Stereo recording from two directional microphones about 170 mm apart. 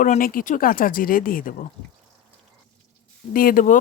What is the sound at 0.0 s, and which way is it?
Speech, 55° left (ahead or behind).